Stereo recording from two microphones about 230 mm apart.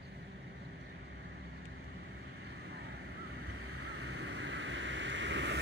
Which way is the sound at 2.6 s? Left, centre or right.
Right.